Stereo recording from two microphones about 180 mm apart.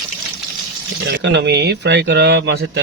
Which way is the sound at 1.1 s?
70° right (ahead or behind).